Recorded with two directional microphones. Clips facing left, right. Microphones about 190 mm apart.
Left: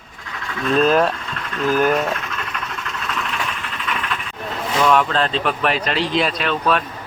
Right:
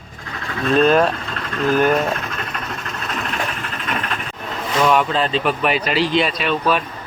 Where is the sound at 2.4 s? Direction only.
40° right (ahead or behind).